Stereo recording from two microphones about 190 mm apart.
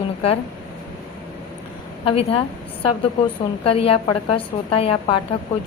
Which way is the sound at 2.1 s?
30° left (ahead or behind).